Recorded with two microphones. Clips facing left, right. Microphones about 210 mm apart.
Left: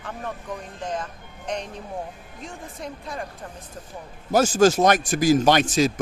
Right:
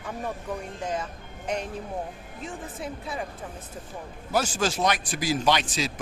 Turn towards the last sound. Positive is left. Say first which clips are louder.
# left 7 dB
turn(degrees=45)  # may be behind; listen again after turning